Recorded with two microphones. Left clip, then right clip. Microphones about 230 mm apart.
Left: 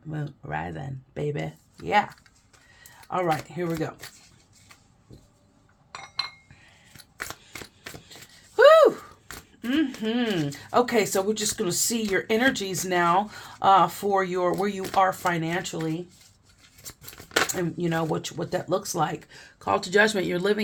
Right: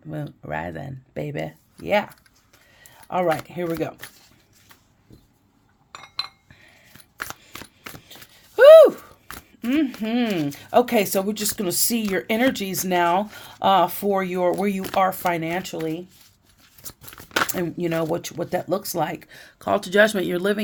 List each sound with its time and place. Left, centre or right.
0.1 s speech: right
2.8 s speech: right
5.9 s cutlery: right
7.2 s single-lens reflex camera: right
9.6 s speech: right
16.8 s tearing: right
17.5 s speech: right